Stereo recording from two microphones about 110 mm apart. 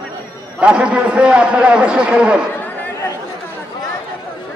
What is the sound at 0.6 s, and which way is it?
A man's voice, 10° right (ahead or behind).